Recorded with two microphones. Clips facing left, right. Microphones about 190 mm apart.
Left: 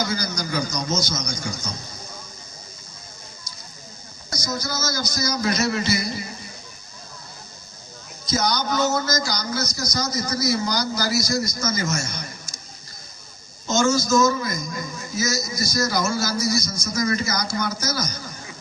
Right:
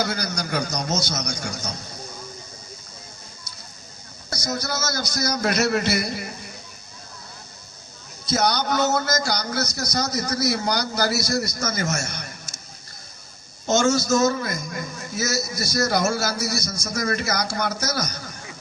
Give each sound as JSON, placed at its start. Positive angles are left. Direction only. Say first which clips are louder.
{"t": 0.0, "sound": "a man's voice", "louder": "even", "side_deg": -65}
{"t": 4.3, "sound": "a man's voice", "louder": "right 1 dB", "side_deg": -65}
{"t": 8.3, "sound": "a man's voice", "louder": "right 1 dB", "side_deg": -65}
{"t": 13.7, "sound": "a man's voice", "louder": "right 1 dB", "side_deg": -65}